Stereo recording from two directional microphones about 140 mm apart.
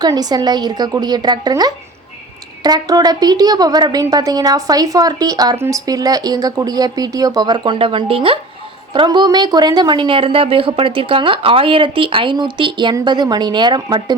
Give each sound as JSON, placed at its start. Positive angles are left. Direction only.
{"t": 0.0, "sound": "a woman's voice", "side_deg": -30}